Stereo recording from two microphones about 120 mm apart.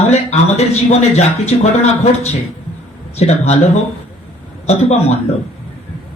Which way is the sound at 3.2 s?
65° left (ahead or behind).